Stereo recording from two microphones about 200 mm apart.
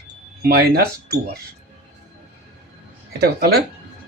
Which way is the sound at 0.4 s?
50° right (ahead or behind).